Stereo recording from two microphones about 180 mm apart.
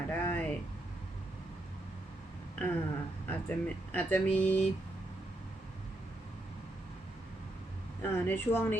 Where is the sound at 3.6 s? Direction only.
10° left (ahead or behind).